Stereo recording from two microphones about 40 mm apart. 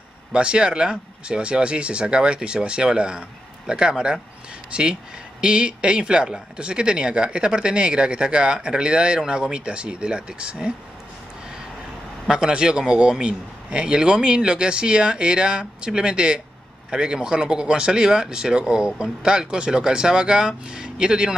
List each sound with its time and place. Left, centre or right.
0.3 s speech: right
12.3 s speech: right